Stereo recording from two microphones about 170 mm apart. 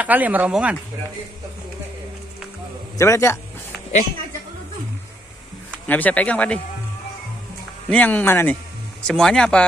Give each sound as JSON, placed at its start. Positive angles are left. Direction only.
{"t": 0.0, "sound": "speech", "side_deg": -10}
{"t": 3.0, "sound": "speech", "side_deg": 15}
{"t": 5.9, "sound": "speech", "side_deg": 10}
{"t": 7.9, "sound": "speech", "side_deg": 10}